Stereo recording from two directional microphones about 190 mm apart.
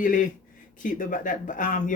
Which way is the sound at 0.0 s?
45° left (ahead or behind).